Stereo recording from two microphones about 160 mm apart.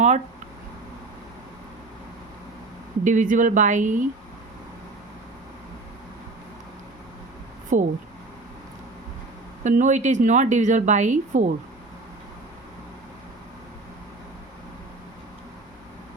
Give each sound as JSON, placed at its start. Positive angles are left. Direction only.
{"t": 3.0, "sound": "a woman's voice", "side_deg": -55}
{"t": 7.7, "sound": "a woman's voice", "side_deg": -50}
{"t": 9.6, "sound": "a woman's voice", "side_deg": -50}